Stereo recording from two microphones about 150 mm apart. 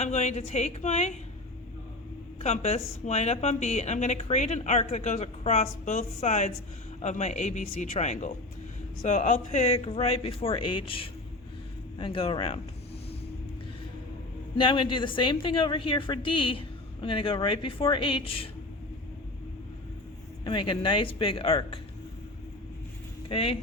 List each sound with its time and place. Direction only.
0.0 s speech: 50° left (ahead or behind)
2.4 s a woman's voice: 45° left (ahead or behind)
14.6 s a woman's voice: 35° left (ahead or behind)
20.4 s a woman's voice: 35° left (ahead or behind)
23.3 s a woman's voice: 40° left (ahead or behind)